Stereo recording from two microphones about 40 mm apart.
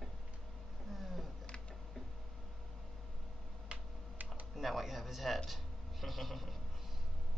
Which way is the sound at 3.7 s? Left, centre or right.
Right.